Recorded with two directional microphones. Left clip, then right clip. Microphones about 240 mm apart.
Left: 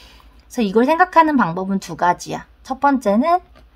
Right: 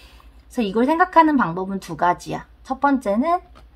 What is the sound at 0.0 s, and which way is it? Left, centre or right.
A woman's voice, left.